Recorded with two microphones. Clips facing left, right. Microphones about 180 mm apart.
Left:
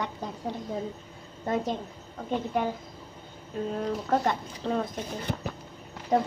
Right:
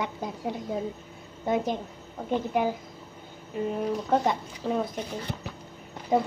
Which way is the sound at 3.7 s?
10° right (ahead or behind).